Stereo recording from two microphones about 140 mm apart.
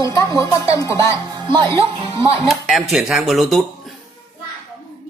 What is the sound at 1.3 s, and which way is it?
Speech, 30° right (ahead or behind).